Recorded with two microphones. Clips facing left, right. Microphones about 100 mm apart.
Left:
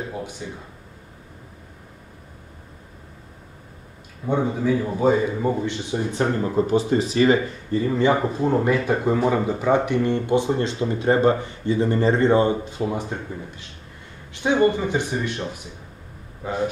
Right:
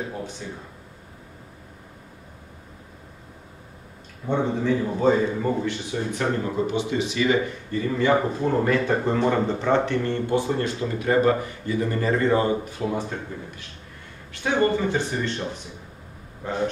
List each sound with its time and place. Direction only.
4.3 s a man's voice: 10° left (ahead or behind)
6.5 s speech: 40° left (ahead or behind); by 13.0 s 20° left (ahead or behind)
14.3 s a man's voice: 20° left (ahead or behind)
16.4 s a man's voice: 5° left (ahead or behind)